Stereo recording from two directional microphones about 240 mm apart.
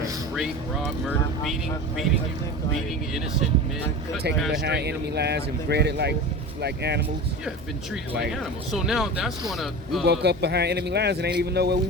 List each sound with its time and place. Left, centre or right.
0.3 s speech: centre
4.5 s a man's voice: right
8.3 s speech: centre
10.1 s a man's voice: right